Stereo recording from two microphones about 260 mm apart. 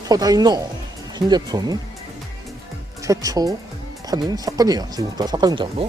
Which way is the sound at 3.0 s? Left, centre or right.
Centre.